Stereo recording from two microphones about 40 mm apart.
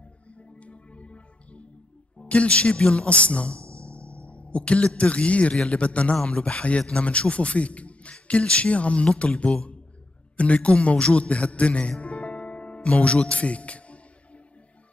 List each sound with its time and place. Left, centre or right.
0.4 s music: left
2.1 s a man's voice: left
12.0 s music: left